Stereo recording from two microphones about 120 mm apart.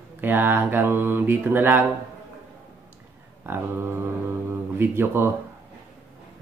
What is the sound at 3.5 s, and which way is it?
Speech, 20° right (ahead or behind).